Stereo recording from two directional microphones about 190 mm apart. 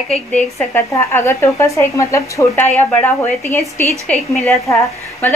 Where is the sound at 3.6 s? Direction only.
15° right (ahead or behind).